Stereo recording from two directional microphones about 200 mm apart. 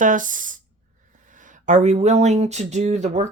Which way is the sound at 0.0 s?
40° right (ahead or behind).